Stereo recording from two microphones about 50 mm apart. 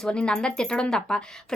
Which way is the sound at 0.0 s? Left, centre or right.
Centre.